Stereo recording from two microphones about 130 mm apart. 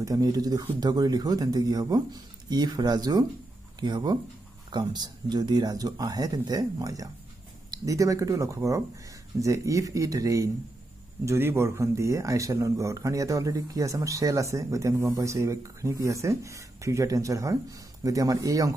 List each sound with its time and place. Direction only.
0.0 s speech: 25° right (ahead or behind)